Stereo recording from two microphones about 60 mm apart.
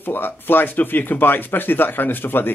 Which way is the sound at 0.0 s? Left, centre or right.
Left.